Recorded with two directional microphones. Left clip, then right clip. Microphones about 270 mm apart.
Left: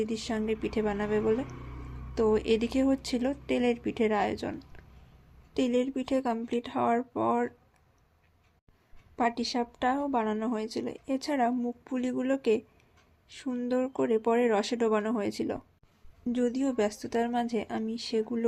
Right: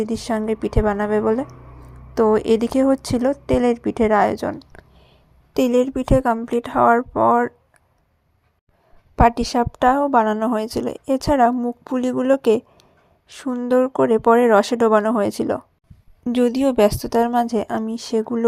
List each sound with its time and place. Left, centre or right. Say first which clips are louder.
0.0 s a woman's voice: right 9 dB; right
9.1 s a woman's voice: right 13 dB; right